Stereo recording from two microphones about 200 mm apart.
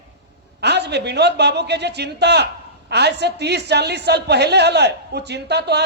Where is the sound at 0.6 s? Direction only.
55° right (ahead or behind).